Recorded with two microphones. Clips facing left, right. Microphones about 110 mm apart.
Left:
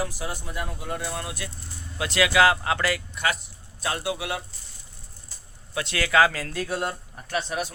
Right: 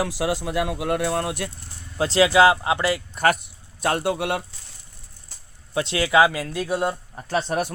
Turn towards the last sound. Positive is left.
turn(degrees=-50)  # may be behind; listen again after turning